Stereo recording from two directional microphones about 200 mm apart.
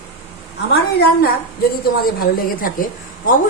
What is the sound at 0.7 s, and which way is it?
A woman's voice, 50° left (ahead or behind).